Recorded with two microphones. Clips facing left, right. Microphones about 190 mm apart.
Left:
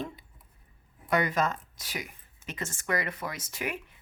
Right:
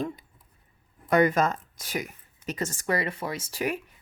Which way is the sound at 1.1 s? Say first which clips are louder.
Right 6 dB; 45° right (ahead or behind).